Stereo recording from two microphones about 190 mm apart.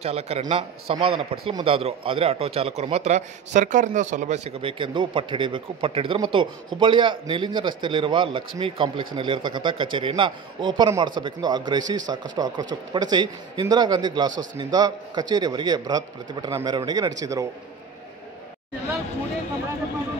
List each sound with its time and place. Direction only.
0.0 s a man's voice: 35° right (ahead or behind)